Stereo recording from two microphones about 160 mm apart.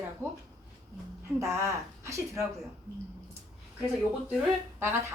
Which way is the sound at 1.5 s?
15° right (ahead or behind).